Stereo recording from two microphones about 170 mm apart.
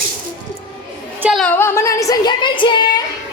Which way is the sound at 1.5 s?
15° left (ahead or behind).